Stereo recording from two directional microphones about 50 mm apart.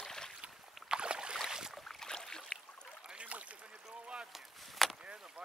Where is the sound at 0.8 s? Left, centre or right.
Centre.